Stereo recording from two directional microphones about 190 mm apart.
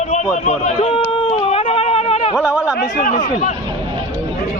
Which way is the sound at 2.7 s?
45° left (ahead or behind).